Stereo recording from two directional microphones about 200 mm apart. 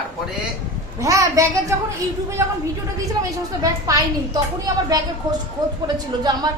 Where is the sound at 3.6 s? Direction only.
15° right (ahead or behind).